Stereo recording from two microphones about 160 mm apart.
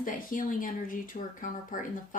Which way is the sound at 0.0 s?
55° left (ahead or behind).